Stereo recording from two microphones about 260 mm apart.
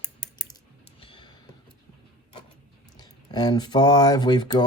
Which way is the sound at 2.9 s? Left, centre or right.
Centre.